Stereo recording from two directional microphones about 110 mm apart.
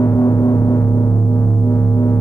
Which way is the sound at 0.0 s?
30° left (ahead or behind).